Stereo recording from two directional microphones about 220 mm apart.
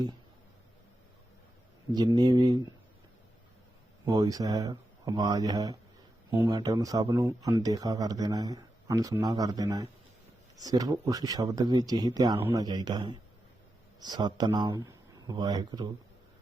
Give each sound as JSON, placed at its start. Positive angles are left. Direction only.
{"t": 2.0, "sound": "speech", "side_deg": -20}
{"t": 4.0, "sound": "speech", "side_deg": -15}